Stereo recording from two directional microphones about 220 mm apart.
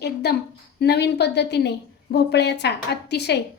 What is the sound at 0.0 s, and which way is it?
A woman's voice, 50° left (ahead or behind).